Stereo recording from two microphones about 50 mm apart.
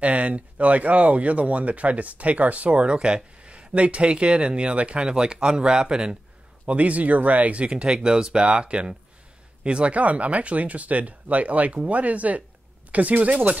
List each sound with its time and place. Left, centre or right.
0.0 s speech: right
6.7 s speech: right